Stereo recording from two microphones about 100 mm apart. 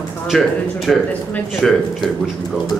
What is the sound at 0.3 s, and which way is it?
A man's voice, centre (ahead or behind).